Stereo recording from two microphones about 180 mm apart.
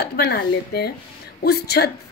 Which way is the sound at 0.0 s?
60° left (ahead or behind).